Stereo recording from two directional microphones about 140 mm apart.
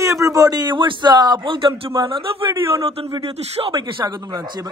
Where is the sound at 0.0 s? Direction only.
25° right (ahead or behind); by 3.8 s 45° right (ahead or behind).